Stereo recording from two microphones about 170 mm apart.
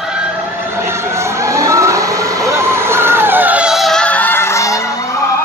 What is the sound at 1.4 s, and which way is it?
Vehicle, 20° right (ahead or behind).